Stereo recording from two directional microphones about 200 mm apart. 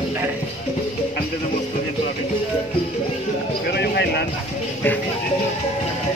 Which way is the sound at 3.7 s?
55° left (ahead or behind).